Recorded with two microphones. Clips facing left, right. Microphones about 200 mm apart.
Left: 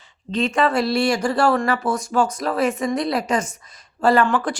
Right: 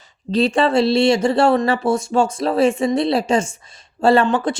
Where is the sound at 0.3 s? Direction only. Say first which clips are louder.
Right 4 dB; 35° right (ahead or behind).